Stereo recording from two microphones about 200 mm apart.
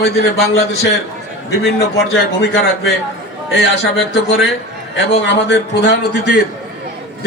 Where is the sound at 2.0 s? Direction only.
60° left (ahead or behind).